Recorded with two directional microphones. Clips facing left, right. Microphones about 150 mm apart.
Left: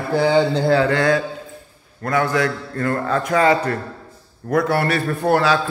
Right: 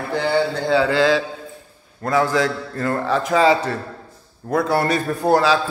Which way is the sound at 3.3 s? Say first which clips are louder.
Right 1 dB; 10° right (ahead or behind).